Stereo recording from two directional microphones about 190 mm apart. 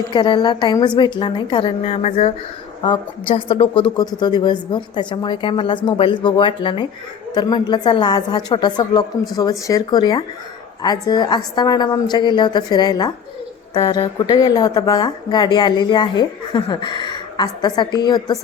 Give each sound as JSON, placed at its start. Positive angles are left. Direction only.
{"t": 0.1, "sound": "a woman's voice", "side_deg": 25}